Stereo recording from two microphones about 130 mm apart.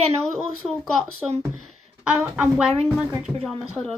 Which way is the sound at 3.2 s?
5° right (ahead or behind).